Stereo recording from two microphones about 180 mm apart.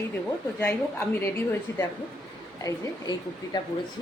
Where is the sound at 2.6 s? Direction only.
20° left (ahead or behind).